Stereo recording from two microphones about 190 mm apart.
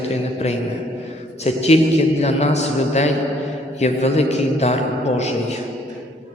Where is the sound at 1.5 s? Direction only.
35° left (ahead or behind).